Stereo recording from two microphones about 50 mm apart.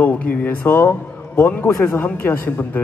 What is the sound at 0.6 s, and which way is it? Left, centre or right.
A man's voice, left.